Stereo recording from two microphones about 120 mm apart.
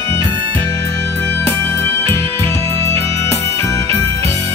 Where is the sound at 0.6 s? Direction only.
25° left (ahead or behind).